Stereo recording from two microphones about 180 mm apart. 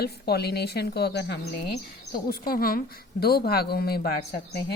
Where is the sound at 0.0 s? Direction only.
65° left (ahead or behind).